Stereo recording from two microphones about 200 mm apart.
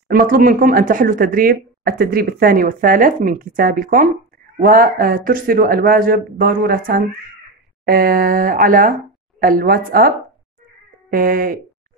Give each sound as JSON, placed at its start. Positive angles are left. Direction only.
{"t": 0.1, "sound": "speech", "side_deg": -45}